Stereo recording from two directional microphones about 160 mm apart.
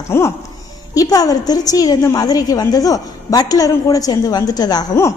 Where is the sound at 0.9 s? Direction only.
25° left (ahead or behind).